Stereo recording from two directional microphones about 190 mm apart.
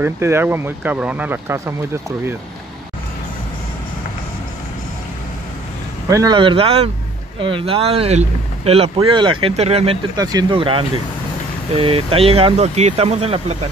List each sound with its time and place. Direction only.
0.0 s speech: 10° right (ahead or behind)
6.0 s speech: 20° right (ahead or behind)
10.1 s speech: 20° right (ahead or behind); by 13.6 s 35° right (ahead or behind)